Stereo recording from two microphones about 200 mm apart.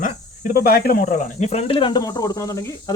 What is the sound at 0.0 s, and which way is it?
Speech, 45° left (ahead or behind).